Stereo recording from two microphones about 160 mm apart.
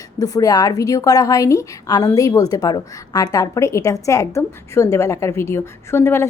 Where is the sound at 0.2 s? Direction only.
25° left (ahead or behind).